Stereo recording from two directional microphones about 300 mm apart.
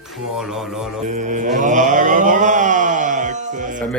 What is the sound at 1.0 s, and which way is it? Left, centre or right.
Mantra, right.